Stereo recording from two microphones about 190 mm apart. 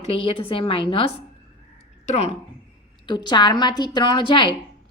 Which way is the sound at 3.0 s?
25° left (ahead or behind).